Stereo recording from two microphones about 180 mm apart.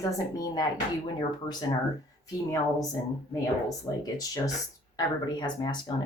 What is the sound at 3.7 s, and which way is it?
A woman's voice, 20° left (ahead or behind).